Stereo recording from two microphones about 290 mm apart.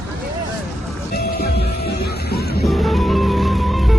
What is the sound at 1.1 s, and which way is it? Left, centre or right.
Music, left.